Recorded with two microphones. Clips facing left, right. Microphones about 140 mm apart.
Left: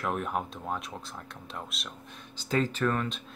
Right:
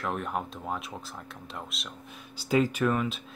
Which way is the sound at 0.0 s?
Centre (ahead or behind).